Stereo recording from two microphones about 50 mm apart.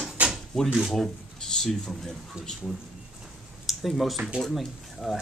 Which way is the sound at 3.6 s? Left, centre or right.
Centre.